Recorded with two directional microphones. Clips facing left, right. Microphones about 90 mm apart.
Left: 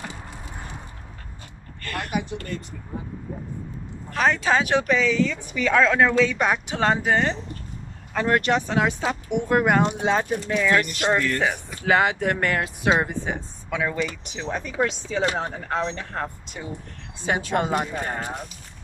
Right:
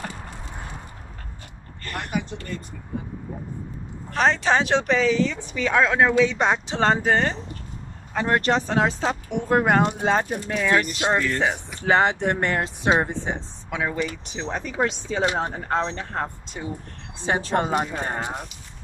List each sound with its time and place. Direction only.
4.1 s speech: 30° right (ahead or behind)
8.1 s speech: 20° right (ahead or behind)
8.4 s speech: 35° right (ahead or behind)
11.0 s speech: 20° right (ahead or behind)
11.4 s speech: 30° right (ahead or behind)
14.2 s speech: 35° right (ahead or behind)